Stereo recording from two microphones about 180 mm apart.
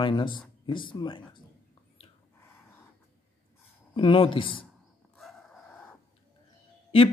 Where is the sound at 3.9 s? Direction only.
30° left (ahead or behind).